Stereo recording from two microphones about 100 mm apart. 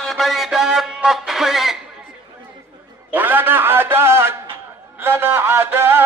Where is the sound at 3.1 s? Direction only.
20° right (ahead or behind).